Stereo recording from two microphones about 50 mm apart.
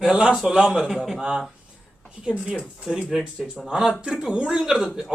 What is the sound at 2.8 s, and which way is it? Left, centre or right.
Speech, centre.